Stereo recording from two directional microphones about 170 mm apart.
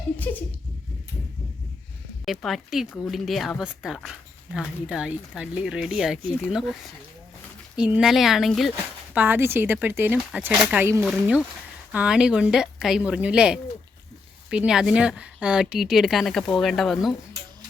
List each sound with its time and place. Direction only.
0.3 s a sound: 10° left (ahead or behind)
2.2 s speech: centre (ahead or behind)
7.8 s speech: 5° right (ahead or behind)
9.1 s speech: 10° right (ahead or behind)